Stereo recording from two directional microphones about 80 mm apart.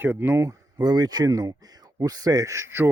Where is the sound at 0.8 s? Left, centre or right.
Right.